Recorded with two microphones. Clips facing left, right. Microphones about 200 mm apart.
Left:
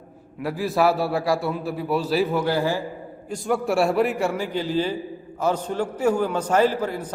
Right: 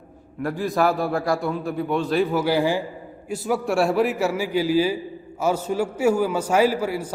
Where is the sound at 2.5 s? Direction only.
15° right (ahead or behind).